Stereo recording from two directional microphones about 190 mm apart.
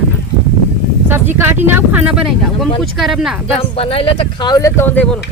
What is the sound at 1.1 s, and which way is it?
Speech, 10° right (ahead or behind).